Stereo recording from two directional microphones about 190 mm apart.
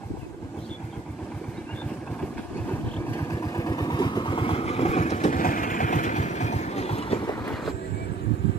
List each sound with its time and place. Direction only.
3.1 s vehicle: 15° left (ahead or behind)